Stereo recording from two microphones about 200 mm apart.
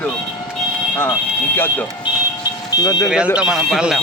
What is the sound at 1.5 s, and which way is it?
Speech, 10° left (ahead or behind).